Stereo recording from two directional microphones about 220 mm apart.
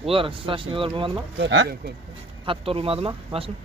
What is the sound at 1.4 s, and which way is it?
Speech, 55° right (ahead or behind).